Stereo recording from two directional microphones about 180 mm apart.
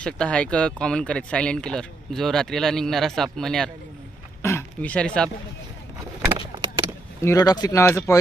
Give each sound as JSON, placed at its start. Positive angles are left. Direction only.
{"t": 0.0, "sound": "speech", "side_deg": 5}
{"t": 4.4, "sound": "a sound", "side_deg": 15}
{"t": 7.2, "sound": "speech", "side_deg": 20}